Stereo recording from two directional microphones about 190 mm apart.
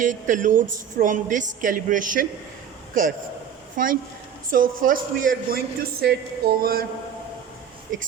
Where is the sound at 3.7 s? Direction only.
45° right (ahead or behind).